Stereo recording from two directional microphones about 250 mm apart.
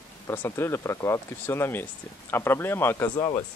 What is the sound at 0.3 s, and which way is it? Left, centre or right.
Speech, centre.